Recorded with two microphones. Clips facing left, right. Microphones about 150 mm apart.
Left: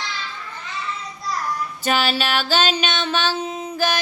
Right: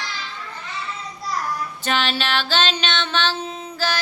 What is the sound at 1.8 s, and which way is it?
Music, 10° left (ahead or behind).